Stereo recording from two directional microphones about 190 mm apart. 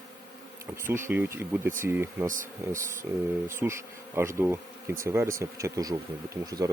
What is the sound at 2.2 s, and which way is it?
Speech, 45° right (ahead or behind).